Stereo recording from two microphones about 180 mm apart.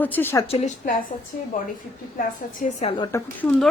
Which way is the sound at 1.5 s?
50° left (ahead or behind).